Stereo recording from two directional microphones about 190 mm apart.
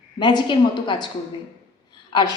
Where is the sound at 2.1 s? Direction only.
25° left (ahead or behind).